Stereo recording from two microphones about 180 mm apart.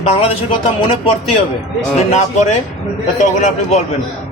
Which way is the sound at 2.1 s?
40° left (ahead or behind).